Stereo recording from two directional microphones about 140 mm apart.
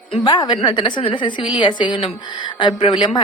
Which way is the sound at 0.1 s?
30° left (ahead or behind).